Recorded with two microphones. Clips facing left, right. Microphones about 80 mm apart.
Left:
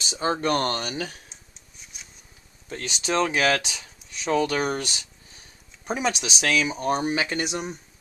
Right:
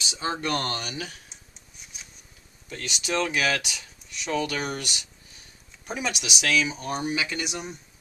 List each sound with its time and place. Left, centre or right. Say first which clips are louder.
0.0 s speech: left 4 dB; left
2.7 s speech: left 3 dB; left